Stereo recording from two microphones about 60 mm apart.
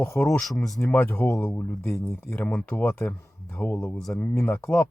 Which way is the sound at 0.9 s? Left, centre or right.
Left.